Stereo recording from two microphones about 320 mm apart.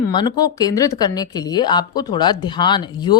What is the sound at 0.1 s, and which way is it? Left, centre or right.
Speech, centre.